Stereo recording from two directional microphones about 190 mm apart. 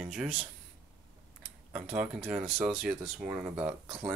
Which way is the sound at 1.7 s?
5° right (ahead or behind).